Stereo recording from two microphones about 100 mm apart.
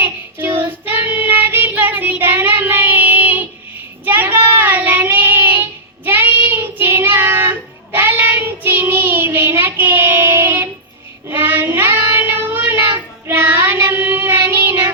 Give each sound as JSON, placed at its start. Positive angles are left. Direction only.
{"t": 0.0, "sound": "child singing", "side_deg": -20}